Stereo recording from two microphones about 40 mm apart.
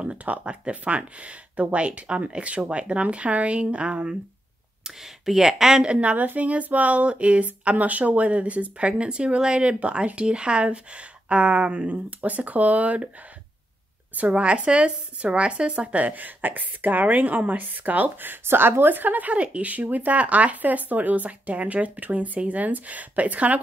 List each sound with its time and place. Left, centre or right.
0.0 s speech: right
4.8 s speech: centre
5.9 s speech: right
14.1 s speech: right
19.3 s speech: right